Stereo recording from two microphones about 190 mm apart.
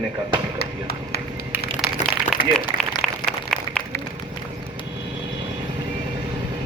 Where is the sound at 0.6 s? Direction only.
55° left (ahead or behind).